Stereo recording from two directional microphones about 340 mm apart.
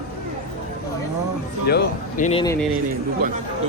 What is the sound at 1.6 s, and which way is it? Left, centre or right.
Speech, left.